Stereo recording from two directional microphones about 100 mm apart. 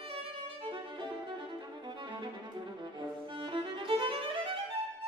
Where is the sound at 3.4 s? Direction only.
55° right (ahead or behind).